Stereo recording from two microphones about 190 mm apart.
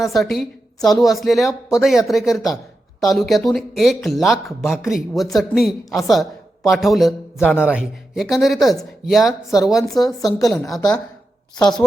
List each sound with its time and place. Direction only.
0.0 s a woman's voice: centre (ahead or behind)